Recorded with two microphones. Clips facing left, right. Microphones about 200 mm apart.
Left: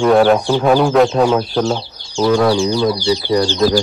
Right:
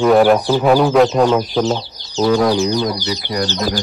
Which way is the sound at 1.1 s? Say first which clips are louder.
Even; 10° left (ahead or behind).